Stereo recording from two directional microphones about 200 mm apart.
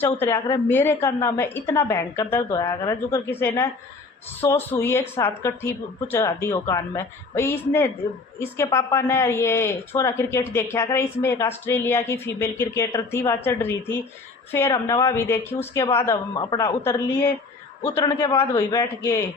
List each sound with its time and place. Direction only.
0.0 s a woman's voice: 10° left (ahead or behind)